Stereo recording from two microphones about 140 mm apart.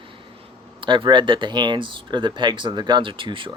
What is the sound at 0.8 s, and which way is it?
Speech, 35° right (ahead or behind).